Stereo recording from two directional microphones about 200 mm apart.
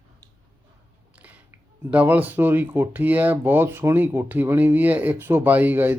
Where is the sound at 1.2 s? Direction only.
10° right (ahead or behind).